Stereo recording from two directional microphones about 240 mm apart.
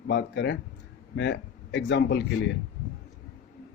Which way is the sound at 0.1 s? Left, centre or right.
Left.